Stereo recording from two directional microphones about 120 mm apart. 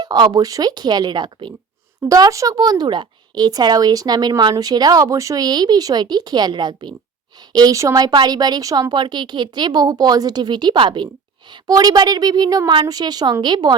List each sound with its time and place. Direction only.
0.0 s speech: 35° right (ahead or behind)
11.6 s speech: 30° right (ahead or behind)